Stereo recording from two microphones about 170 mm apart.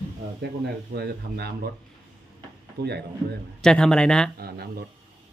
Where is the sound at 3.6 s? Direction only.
5° left (ahead or behind).